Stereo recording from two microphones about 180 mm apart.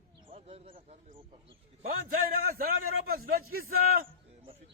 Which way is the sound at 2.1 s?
55° right (ahead or behind).